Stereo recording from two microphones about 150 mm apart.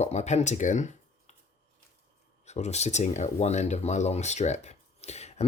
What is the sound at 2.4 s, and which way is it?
Speech, 45° left (ahead or behind).